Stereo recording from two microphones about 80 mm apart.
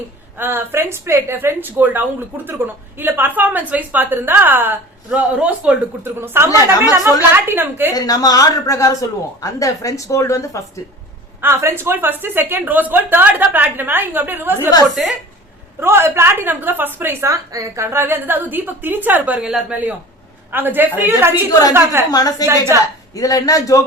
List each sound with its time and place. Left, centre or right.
0.3 s a woman's voice: right
7.9 s a man's voice: left
11.3 s a woman's voice: right
15.8 s a woman's voice: right
17.3 s a woman's voice: right; by 19.5 s centre
20.5 s a woman's voice: right
22.1 s a man's voice: left
22.7 s a woman's voice: right
23.1 s a man's voice: left